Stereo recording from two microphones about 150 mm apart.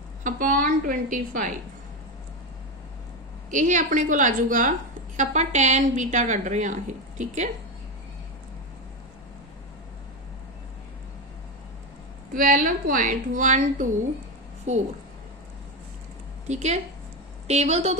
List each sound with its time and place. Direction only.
0.2 s a woman's voice: 65° right (ahead or behind)
3.4 s a woman's voice: 55° right (ahead or behind)
12.4 s a woman's voice: 65° right (ahead or behind)
16.4 s a woman's voice: 50° right (ahead or behind)